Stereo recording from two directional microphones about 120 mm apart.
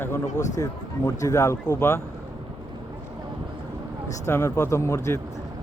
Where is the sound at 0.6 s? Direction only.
30° left (ahead or behind).